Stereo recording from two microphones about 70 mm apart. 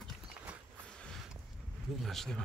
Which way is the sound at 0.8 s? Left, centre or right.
Centre.